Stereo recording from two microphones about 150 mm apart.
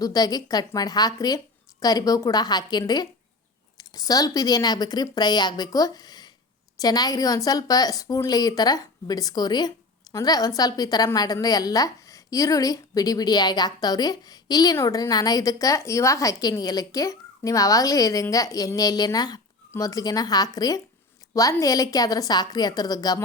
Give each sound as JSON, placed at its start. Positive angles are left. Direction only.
{"t": 0.0, "sound": "speech", "side_deg": 25}